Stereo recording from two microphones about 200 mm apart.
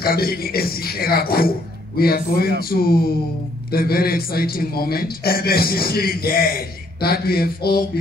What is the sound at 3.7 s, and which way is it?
A man's voice, 50° left (ahead or behind).